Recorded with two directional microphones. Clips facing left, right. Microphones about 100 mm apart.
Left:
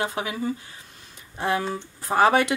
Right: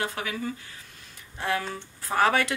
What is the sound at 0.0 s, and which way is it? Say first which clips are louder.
Speech: left 4 dB; 20° left (ahead or behind).